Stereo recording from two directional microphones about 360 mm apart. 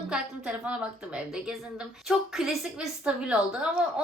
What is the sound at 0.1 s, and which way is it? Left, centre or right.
A woman's voice, centre.